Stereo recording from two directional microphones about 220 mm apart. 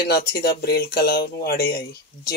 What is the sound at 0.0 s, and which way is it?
Speech, 45° left (ahead or behind).